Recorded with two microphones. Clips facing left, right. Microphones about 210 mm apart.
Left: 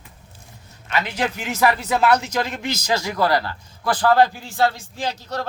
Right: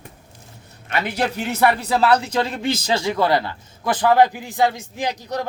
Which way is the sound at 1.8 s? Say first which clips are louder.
Right 1 dB; 35° right (ahead or behind).